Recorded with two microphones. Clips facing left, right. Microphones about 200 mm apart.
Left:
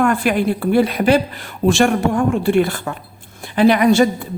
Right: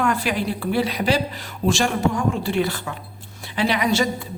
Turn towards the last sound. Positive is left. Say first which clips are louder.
# left 9 dB
turn(degrees=50)  # may be behind; listen again after turning